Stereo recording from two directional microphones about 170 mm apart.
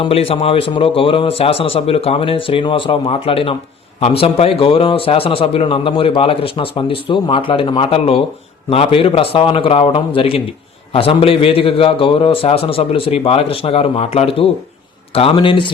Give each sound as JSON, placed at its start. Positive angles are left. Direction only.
{"t": 0.0, "sound": "a man's voice", "side_deg": 35}